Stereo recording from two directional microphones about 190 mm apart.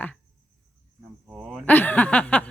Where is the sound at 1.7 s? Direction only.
10° left (ahead or behind).